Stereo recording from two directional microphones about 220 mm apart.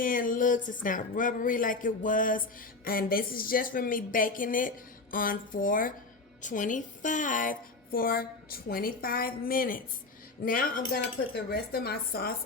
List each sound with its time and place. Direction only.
0.0 s a woman's voice: 40° left (ahead or behind)